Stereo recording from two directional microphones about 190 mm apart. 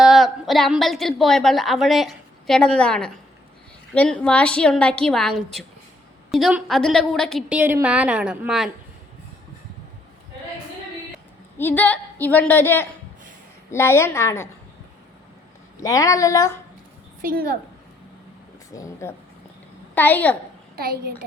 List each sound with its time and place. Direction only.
0.0 s a woman's voice: centre (ahead or behind)
7.6 s a woman's voice: 10° right (ahead or behind)
11.5 s a woman's voice: 10° left (ahead or behind)
15.8 s a woman's voice: 15° left (ahead or behind)
17.2 s a woman's voice: 50° right (ahead or behind)
18.7 s a woman's voice: 15° left (ahead or behind)
20.7 s a child's voice: 55° right (ahead or behind)